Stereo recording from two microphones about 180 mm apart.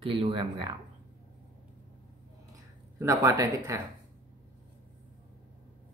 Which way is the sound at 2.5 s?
20° right (ahead or behind).